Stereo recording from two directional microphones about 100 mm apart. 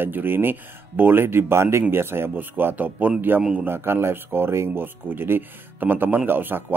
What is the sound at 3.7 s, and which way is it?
Speech, 25° right (ahead or behind).